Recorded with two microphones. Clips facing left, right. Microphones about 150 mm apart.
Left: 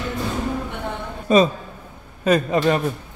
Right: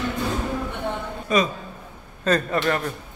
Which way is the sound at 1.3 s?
25° left (ahead or behind).